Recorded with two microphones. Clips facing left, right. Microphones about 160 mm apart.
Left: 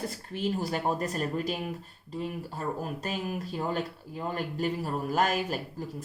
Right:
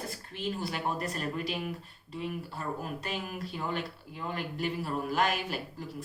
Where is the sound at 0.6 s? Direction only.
40° left (ahead or behind).